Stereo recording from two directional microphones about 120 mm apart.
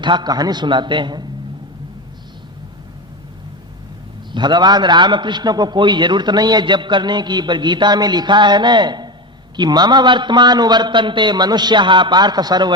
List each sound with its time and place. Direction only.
0.0 s a man's voice: 40° right (ahead or behind)
4.3 s a man's voice: 40° right (ahead or behind)